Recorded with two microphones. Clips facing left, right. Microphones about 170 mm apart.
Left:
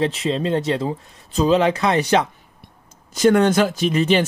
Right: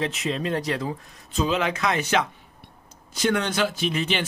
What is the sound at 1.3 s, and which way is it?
Speech, 35° left (ahead or behind).